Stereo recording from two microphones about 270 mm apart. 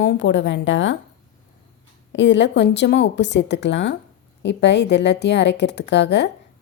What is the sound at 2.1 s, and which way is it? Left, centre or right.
Speech, left.